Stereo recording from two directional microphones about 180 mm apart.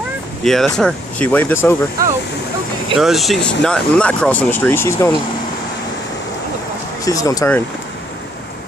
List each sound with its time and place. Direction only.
0.4 s speech: centre (ahead or behind)
3.0 s speech: centre (ahead or behind)
7.1 s speech: 20° left (ahead or behind)